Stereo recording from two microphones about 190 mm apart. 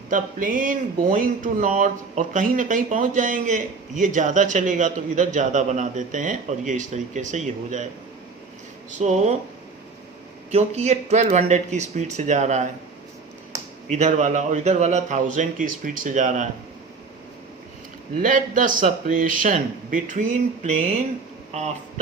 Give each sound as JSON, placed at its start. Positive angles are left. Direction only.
{"t": 0.1, "sound": "speech", "side_deg": -45}
{"t": 9.0, "sound": "speech", "side_deg": -35}
{"t": 10.5, "sound": "speech", "side_deg": -35}
{"t": 13.9, "sound": "speech", "side_deg": -40}
{"t": 18.2, "sound": "a man's voice", "side_deg": -45}